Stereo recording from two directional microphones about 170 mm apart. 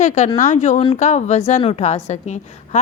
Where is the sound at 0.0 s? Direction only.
45° left (ahead or behind).